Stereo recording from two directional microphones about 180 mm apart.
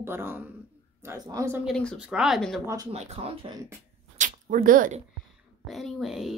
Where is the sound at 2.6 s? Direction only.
15° right (ahead or behind).